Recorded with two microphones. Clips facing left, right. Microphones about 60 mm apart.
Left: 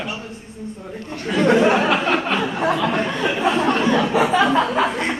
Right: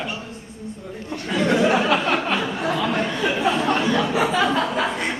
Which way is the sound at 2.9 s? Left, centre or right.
Centre.